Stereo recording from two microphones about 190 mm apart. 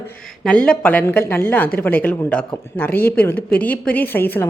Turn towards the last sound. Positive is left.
turn(degrees=10)  # may be behind; listen again after turning